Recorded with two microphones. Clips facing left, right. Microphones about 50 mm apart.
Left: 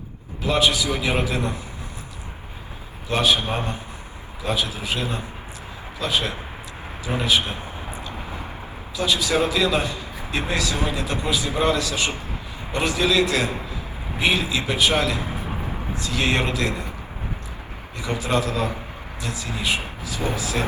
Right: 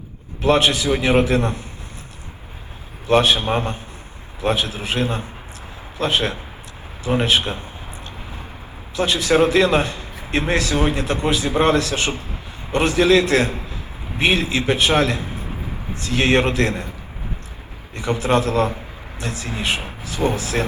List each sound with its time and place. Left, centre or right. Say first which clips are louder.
0.4 s a man's voice: right 4 dB; right
3.1 s a man's voice: right 5 dB; right
9.0 s a man's voice: right 5 dB; right
17.9 s a man's voice: right 5 dB; right